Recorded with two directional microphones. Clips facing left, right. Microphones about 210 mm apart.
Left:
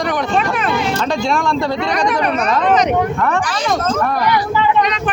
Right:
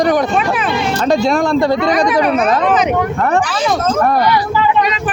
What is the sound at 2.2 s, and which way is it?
Speech, centre (ahead or behind).